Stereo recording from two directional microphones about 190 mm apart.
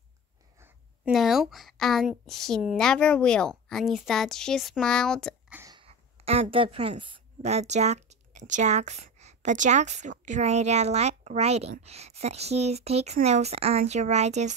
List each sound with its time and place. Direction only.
0.6 s speech: 5° right (ahead or behind)
5.5 s sneeze: 15° right (ahead or behind)
5.8 s a woman's voice: 30° right (ahead or behind)